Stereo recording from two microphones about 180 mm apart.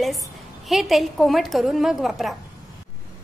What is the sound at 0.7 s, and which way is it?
A woman's voice, centre (ahead or behind).